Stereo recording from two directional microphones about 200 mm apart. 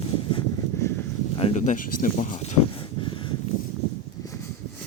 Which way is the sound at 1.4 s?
35° left (ahead or behind).